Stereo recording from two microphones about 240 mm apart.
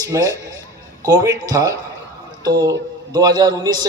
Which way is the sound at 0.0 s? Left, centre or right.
Centre.